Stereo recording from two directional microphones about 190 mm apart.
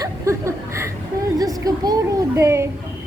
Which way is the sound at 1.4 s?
20° right (ahead or behind).